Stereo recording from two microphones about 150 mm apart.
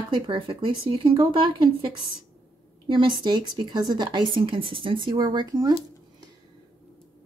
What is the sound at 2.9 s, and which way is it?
Speech, 35° right (ahead or behind).